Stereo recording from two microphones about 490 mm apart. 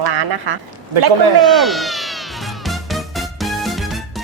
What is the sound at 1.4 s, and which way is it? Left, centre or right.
Speech, centre.